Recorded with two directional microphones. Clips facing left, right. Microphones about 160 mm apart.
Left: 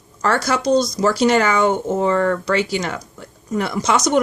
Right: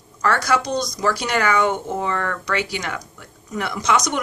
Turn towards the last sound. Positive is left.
turn(degrees=30)  # may be behind; listen again after turning